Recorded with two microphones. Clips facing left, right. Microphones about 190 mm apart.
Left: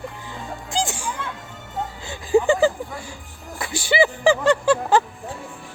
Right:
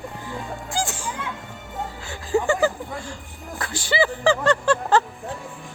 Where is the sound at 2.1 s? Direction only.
15° left (ahead or behind).